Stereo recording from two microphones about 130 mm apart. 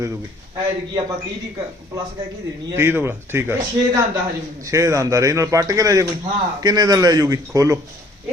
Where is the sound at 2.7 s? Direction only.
20° right (ahead or behind).